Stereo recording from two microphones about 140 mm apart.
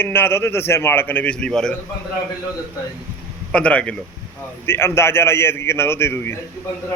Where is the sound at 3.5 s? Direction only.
10° left (ahead or behind).